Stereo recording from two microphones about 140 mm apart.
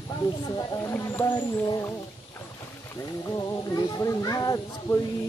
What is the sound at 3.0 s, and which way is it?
Speech, 25° left (ahead or behind).